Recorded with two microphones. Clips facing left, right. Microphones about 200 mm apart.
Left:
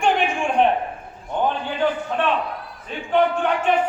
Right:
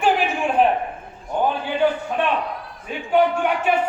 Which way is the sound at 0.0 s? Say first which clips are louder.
Right 1 dB; 5° right (ahead or behind).